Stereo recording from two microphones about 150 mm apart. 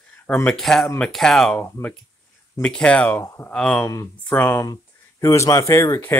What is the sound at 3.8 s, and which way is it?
Speech, 20° left (ahead or behind).